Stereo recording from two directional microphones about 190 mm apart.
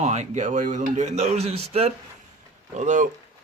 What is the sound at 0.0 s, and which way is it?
Speech, 35° right (ahead or behind).